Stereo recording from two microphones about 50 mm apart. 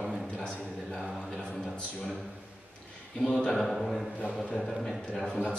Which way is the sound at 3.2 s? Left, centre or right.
Centre.